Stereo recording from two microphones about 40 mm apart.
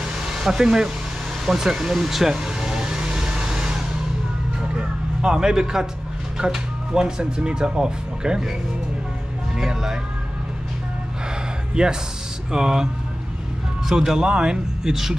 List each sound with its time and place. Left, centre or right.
0.3 s speech: centre
1.4 s vehicle: centre
6.3 s speech: centre
9.6 s speech: centre
11.7 s speech: centre
13.8 s speech: centre